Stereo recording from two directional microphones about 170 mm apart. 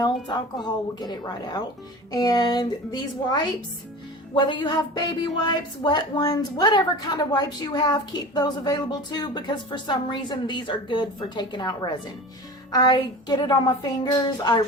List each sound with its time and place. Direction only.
0.0 s a woman's voice: 25° left (ahead or behind)